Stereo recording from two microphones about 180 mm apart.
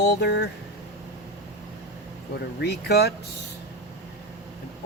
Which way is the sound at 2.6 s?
65° left (ahead or behind).